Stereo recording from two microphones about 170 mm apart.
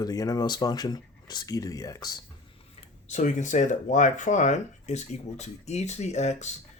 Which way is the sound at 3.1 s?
45° left (ahead or behind).